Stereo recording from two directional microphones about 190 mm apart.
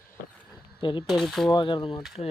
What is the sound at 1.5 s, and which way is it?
Speech, 25° left (ahead or behind).